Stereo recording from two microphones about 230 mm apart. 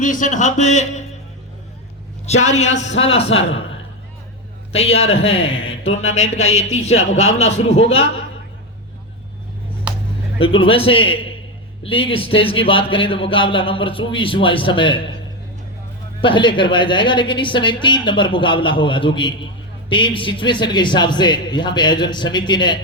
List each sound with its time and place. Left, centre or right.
0.0 s speech: left
2.2 s a man's voice: left
5.1 s a man's voice: left
9.9 s vehicle: centre
10.3 s a man's voice: left
16.2 s a man's voice: left